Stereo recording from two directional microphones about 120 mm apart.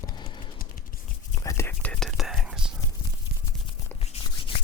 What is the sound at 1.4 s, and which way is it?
Whispering, 20° left (ahead or behind).